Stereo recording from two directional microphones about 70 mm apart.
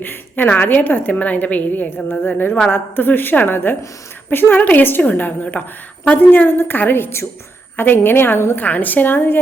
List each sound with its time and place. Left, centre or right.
0.0 s a woman's voice: left